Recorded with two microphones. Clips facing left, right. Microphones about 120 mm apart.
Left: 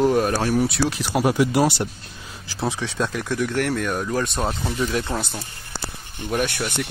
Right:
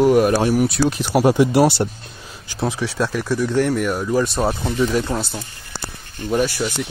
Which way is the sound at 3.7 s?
5° right (ahead or behind).